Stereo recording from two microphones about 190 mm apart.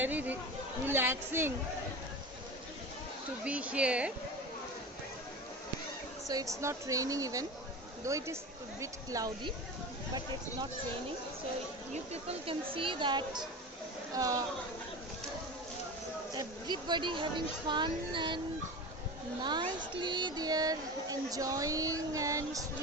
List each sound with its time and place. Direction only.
0.0 s a woman's voice: 10° right (ahead or behind)
3.4 s a woman's voice: 5° right (ahead or behind)
6.2 s a woman's voice: 15° right (ahead or behind)
12.1 s speech: 30° right (ahead or behind)
16.3 s speech: 20° right (ahead or behind)
19.4 s speech: 25° right (ahead or behind)